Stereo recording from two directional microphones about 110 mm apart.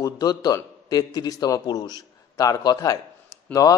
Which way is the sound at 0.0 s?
35° left (ahead or behind).